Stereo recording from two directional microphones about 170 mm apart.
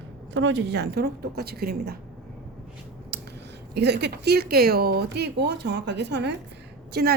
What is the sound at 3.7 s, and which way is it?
Speech, 80° right.